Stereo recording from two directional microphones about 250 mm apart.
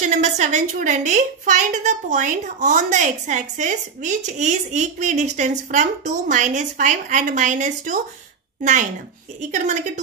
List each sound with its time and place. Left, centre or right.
0.0 s a woman's voice: right
9.4 s a woman's voice: right